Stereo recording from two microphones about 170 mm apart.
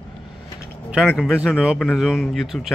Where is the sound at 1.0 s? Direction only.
Centre (ahead or behind).